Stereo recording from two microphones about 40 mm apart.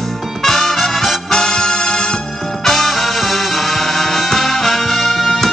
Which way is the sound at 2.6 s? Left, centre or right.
Centre.